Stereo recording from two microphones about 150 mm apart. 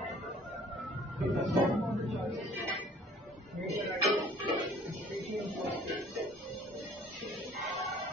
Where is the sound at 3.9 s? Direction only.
40° right (ahead or behind).